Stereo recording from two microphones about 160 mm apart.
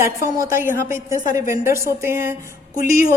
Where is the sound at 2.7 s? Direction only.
60° left (ahead or behind).